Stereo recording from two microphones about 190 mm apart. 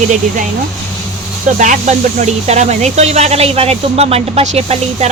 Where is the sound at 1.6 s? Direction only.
40° right (ahead or behind).